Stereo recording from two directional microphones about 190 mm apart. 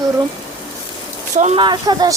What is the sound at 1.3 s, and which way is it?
Speech, 35° right (ahead or behind).